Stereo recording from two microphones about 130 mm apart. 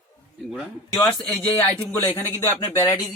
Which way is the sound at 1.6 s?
15° left (ahead or behind).